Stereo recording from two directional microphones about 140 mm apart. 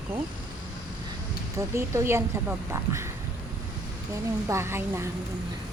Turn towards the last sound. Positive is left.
turn(degrees=-20)  # may be behind; listen again after turning